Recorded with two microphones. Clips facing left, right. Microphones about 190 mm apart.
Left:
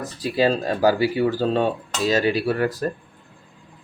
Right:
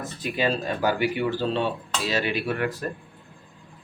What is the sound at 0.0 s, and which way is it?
Speech, 35° left (ahead or behind).